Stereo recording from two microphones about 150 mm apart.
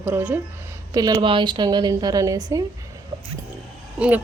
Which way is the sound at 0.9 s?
25° right (ahead or behind).